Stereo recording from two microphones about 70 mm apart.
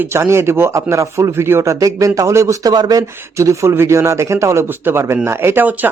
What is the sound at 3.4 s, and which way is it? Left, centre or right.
Speech, right.